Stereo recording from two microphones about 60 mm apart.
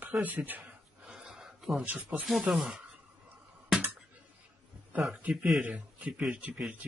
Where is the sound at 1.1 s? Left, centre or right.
Centre.